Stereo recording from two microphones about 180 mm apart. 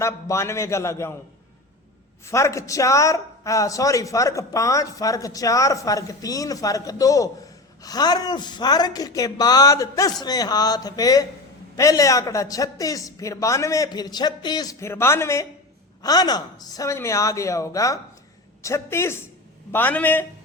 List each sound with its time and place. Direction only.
0.0 s a man's voice: 15° left (ahead or behind)
2.2 s a man's voice: 15° left (ahead or behind)